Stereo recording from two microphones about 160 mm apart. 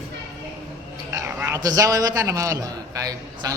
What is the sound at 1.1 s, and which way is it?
A man's voice, 15° right (ahead or behind).